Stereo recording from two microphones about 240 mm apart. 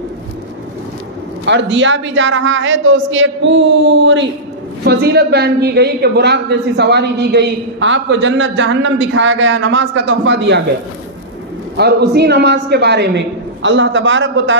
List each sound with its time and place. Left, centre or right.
1.4 s a woman's voice: right
11.7 s a woman's voice: right